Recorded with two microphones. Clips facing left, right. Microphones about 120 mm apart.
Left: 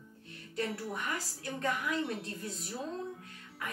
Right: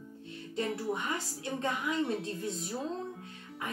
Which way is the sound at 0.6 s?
20° right (ahead or behind).